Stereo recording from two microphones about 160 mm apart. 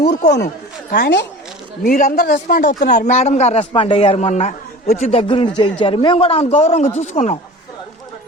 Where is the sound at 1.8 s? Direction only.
55° left (ahead or behind).